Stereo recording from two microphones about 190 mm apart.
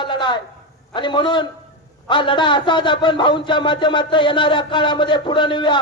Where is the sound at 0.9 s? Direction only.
25° left (ahead or behind).